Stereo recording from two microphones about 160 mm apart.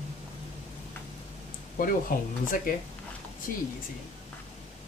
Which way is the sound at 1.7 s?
60° left (ahead or behind).